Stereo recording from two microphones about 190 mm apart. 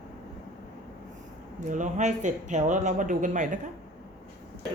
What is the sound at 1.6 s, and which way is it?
Speech, 40° right (ahead or behind).